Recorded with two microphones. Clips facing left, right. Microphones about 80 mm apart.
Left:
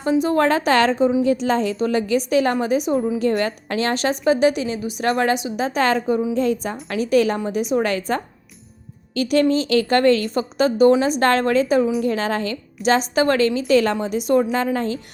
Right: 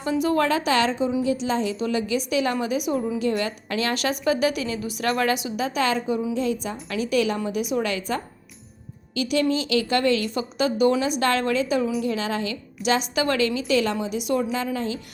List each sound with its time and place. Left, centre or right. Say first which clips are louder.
0.0 s a woman's voice: left 4 dB; left
0.4 s a woman's voice: left 5 dB; left